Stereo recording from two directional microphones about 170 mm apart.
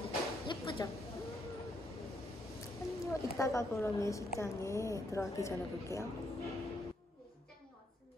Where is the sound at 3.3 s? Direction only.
15° left (ahead or behind).